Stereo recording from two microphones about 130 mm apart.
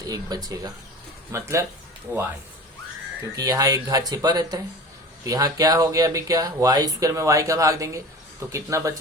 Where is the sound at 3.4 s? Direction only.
30° right (ahead or behind).